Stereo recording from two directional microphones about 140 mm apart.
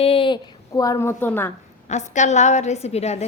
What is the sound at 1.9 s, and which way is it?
A woman's voice, 55° left (ahead or behind).